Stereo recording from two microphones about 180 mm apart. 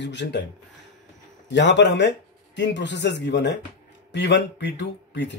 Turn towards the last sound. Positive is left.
turn(degrees=80)